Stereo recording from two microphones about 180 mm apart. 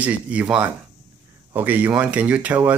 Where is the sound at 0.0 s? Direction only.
5° right (ahead or behind).